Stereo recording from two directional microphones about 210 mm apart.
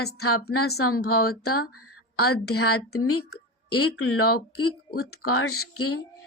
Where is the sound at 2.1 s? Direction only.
90° left.